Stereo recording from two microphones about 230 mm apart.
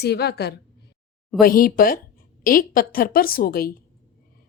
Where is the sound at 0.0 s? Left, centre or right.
Left.